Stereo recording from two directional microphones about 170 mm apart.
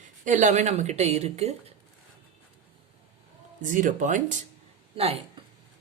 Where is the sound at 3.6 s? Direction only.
50° right (ahead or behind).